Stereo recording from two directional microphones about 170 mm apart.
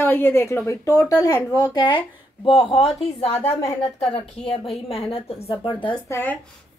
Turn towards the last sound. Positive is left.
turn(degrees=15)  # may be behind; listen again after turning